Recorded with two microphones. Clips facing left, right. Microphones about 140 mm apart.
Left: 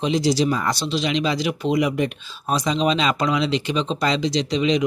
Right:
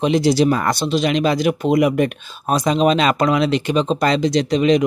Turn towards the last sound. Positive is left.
turn(degrees=-50)  # may be behind; listen again after turning